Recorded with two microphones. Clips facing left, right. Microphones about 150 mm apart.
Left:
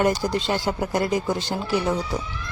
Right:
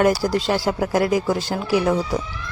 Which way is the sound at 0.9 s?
5° right (ahead or behind).